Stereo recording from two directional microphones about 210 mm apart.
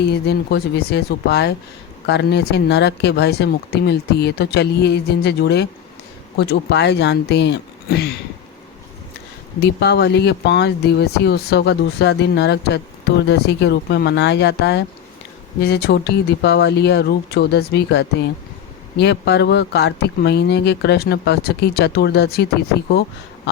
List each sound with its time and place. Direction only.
0.0 s speech: 50° left (ahead or behind)
9.6 s speech: 50° left (ahead or behind)